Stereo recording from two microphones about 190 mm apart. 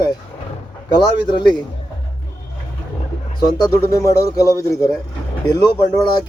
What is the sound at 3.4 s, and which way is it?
Speech, 20° left (ahead or behind).